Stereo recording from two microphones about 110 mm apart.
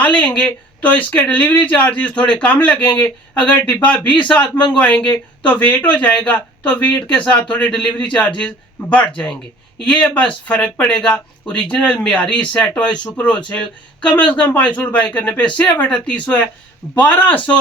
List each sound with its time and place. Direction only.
0.0 s speech: 15° left (ahead or behind)